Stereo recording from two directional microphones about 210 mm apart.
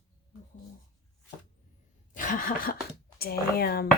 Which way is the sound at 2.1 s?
40° left (ahead or behind).